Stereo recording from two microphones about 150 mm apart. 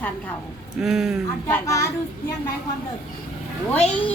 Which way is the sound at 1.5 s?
15° left (ahead or behind).